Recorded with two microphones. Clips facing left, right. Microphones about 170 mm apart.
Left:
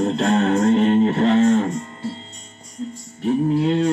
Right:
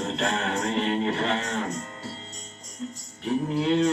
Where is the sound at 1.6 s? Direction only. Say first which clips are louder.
Left 7 dB; 40° right (ahead or behind).